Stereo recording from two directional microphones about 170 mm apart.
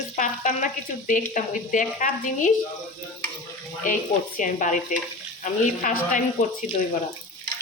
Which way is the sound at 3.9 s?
50° left (ahead or behind).